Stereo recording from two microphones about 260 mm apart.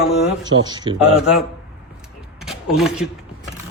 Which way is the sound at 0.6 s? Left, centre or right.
Centre.